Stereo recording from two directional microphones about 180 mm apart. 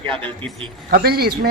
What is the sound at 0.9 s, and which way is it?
Speech, 60° right (ahead or behind).